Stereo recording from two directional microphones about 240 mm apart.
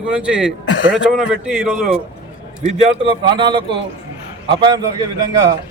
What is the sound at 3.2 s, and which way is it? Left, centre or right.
Speech, centre.